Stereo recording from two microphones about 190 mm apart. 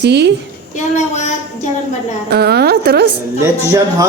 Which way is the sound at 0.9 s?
40° left (ahead or behind).